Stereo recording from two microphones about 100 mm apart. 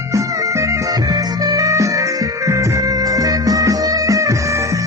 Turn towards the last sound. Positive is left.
turn(degrees=-30)  # may be behind; listen again after turning